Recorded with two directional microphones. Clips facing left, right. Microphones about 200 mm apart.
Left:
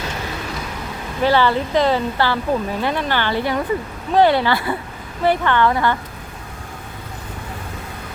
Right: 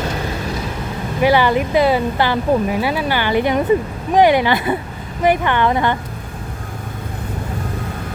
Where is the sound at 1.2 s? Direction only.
15° right (ahead or behind).